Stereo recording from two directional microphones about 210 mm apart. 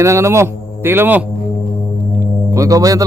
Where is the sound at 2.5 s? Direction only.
15° right (ahead or behind).